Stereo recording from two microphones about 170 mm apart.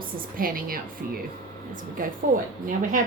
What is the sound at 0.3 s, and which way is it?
Speech, 55° right (ahead or behind).